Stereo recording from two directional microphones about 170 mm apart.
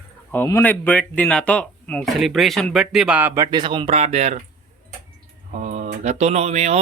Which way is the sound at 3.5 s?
25° right (ahead or behind).